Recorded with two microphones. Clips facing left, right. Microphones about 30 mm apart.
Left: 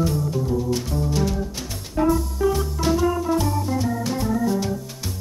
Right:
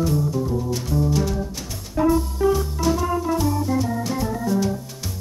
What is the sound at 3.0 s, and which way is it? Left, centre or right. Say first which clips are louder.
Organ: left 1 dB; centre.